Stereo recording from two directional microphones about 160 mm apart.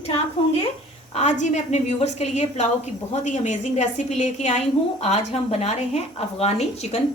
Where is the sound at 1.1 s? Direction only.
45° left (ahead or behind).